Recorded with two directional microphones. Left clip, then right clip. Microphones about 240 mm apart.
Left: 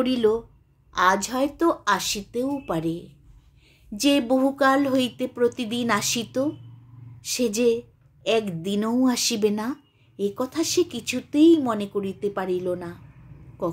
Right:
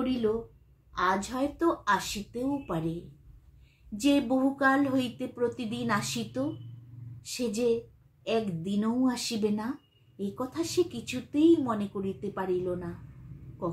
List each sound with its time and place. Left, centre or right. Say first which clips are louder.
0.0 s speech: left 8 dB; left